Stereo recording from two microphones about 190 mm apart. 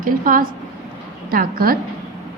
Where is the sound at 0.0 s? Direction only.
45° right (ahead or behind).